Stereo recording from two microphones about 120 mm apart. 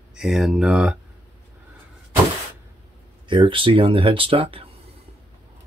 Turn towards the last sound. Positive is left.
turn(degrees=-50)  # may be behind; listen again after turning